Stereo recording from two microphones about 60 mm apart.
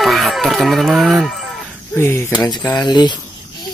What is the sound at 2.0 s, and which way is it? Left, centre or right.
Speech, left.